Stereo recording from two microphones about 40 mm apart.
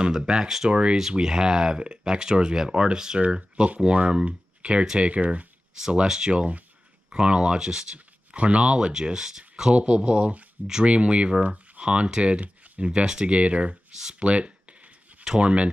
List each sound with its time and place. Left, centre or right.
0.0 s speech: centre
0.7 s speech: right
3.5 s speech: right
5.8 s speech: centre
6.3 s speech: right
9.8 s speech: right
11.4 s a sound: right
11.8 s speech: right
14.2 s a sound: right
15.4 s speech: right